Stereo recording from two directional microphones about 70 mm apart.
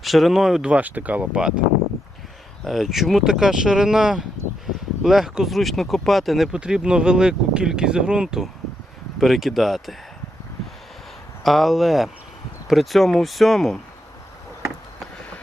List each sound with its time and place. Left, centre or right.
0.0 s speech: centre
0.7 s speech: right
2.6 s speech: centre
11.4 s speech: centre